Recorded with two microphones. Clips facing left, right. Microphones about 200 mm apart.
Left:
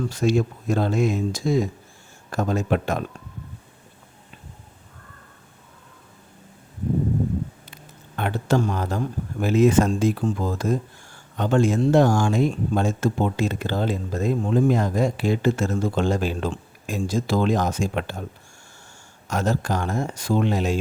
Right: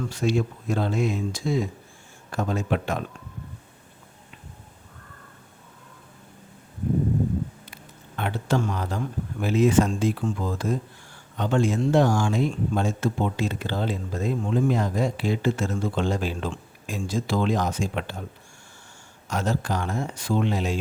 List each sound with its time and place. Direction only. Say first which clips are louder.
0.1 s speech: left 2 dB; 45° left (ahead or behind)
8.1 s speech: left 3 dB; 45° left (ahead or behind)
19.3 s speech: left 3 dB; 45° left (ahead or behind)